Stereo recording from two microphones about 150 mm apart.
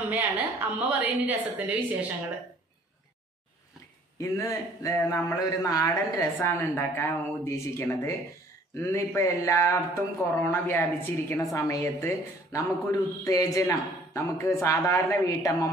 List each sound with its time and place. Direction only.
0.0 s a woman's voice: 10° right (ahead or behind)
4.2 s a woman's voice: 20° left (ahead or behind)